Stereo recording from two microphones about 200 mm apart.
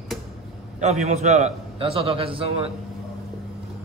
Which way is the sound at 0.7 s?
30° right (ahead or behind).